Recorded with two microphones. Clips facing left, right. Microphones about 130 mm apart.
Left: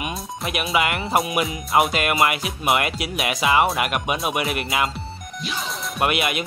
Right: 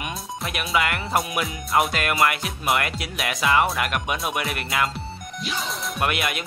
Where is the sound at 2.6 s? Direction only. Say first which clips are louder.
Left 3 dB; 20° left (ahead or behind).